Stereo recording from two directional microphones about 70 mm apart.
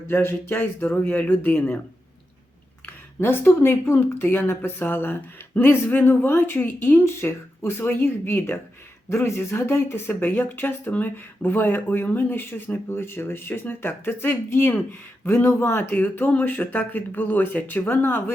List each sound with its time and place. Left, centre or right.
0.1 s speech: left
2.8 s speech: left